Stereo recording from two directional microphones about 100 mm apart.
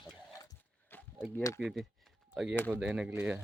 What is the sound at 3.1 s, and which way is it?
Speech, 20° right (ahead or behind).